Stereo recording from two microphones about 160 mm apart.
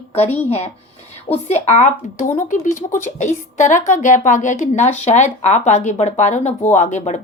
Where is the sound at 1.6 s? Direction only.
50° left (ahead or behind).